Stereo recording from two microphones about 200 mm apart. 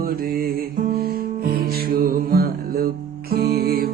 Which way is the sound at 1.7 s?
50° right (ahead or behind).